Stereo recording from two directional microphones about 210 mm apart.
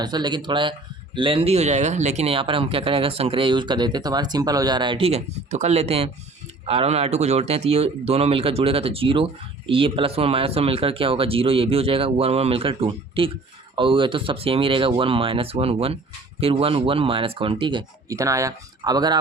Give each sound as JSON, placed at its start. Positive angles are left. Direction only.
{"t": 0.0, "sound": "speech", "side_deg": -20}